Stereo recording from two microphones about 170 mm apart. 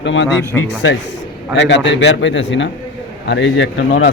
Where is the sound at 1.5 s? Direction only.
90° left.